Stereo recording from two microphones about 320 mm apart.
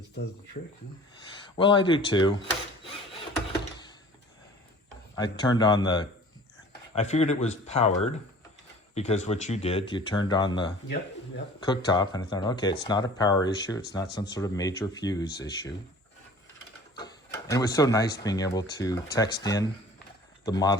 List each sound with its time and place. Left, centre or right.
1.5 s speech: centre
5.1 s speech: centre
16.9 s speech: centre